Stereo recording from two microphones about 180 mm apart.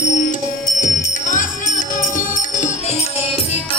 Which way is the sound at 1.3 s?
45° left (ahead or behind).